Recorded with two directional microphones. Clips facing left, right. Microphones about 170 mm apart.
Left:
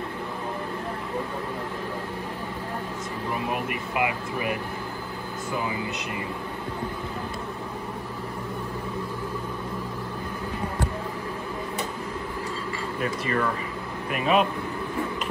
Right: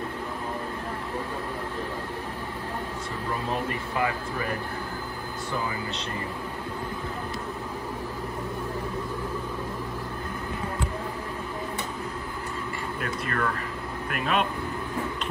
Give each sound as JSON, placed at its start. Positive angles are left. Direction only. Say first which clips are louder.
{"t": 3.4, "sound": "speech", "louder": "even", "side_deg": 15}
{"t": 13.0, "sound": "speech", "louder": "left 4 dB", "side_deg": 0}